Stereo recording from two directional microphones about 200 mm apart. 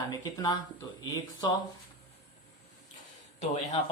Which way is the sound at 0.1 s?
20° left (ahead or behind).